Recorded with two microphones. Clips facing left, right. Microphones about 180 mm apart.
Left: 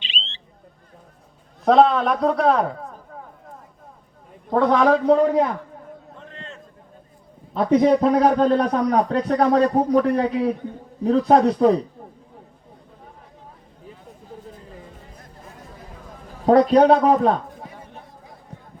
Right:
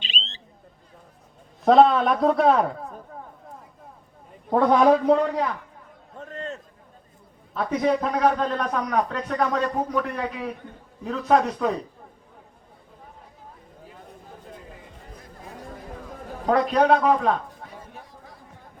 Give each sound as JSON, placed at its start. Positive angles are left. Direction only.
{"t": 0.0, "sound": "a sound", "side_deg": -40}
{"t": 1.6, "sound": "a man's voice", "side_deg": 0}
{"t": 4.4, "sound": "a man's voice", "side_deg": -10}
{"t": 6.1, "sound": "a sound", "side_deg": -45}
{"t": 7.5, "sound": "a man's voice", "side_deg": 30}
{"t": 16.5, "sound": "a man's voice", "side_deg": 35}